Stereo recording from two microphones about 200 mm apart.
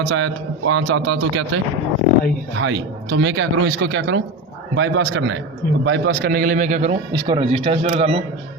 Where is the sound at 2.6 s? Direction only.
70° right (ahead or behind); by 6.9 s 35° right (ahead or behind).